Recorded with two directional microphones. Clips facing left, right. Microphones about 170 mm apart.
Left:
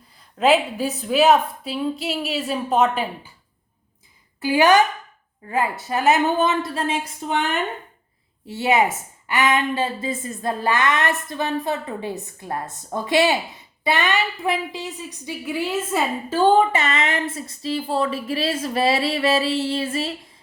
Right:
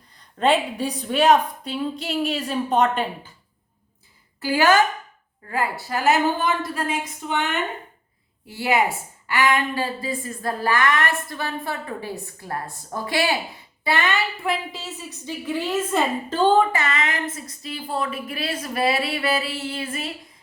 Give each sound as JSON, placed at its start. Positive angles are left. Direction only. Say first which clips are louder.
{"t": 0.2, "sound": "a woman's voice", "louder": "left 2 dB", "side_deg": 5}
{"t": 4.4, "sound": "a woman's voice", "louder": "left 2 dB", "side_deg": 15}
{"t": 8.4, "sound": "a woman's voice", "louder": "left 2 dB", "side_deg": 20}